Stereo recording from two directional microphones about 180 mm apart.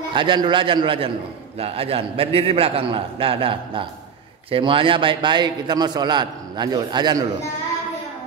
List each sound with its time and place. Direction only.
0.1 s a man's voice: 25° right (ahead or behind)